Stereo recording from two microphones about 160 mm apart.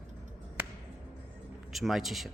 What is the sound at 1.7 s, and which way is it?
Speech, centre (ahead or behind).